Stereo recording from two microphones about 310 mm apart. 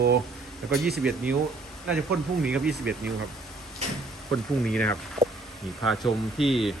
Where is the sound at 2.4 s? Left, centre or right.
Centre.